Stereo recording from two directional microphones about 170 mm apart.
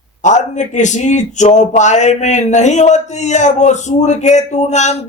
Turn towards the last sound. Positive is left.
turn(degrees=45)  # may be behind; listen again after turning